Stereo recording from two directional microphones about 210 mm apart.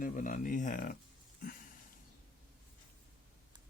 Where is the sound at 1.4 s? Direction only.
40° left (ahead or behind).